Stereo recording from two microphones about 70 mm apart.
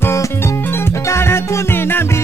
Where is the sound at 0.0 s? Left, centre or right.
Left.